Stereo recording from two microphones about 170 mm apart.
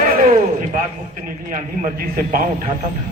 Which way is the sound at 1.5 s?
55° right (ahead or behind).